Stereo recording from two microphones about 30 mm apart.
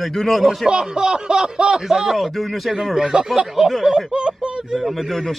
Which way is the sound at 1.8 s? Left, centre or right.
Centre.